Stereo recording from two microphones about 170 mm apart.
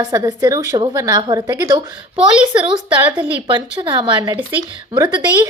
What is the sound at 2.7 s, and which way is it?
A woman's voice, 25° right (ahead or behind).